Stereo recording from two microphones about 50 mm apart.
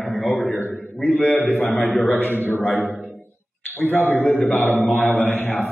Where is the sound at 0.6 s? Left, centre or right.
Right.